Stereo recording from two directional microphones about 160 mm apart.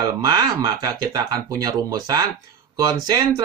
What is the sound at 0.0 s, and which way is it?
Speech, 25° right (ahead or behind).